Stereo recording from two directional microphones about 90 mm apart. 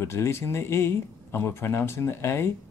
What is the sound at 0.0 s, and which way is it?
Speech, 30° left (ahead or behind).